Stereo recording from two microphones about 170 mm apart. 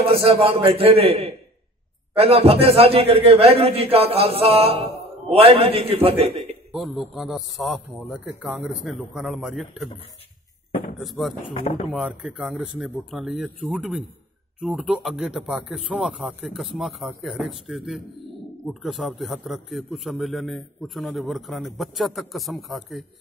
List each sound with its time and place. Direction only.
0.0 s speech: 35° right (ahead or behind)
6.7 s a man's voice: centre (ahead or behind)
11.0 s a man's voice: centre (ahead or behind)
11.6 s speech: 30° left (ahead or behind)
11.9 s a man's voice: 5° right (ahead or behind)